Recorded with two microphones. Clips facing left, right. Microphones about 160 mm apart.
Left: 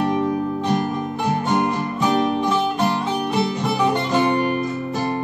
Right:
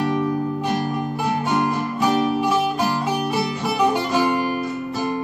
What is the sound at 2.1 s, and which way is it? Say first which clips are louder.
Music: left 1 dB; 5° right (ahead or behind).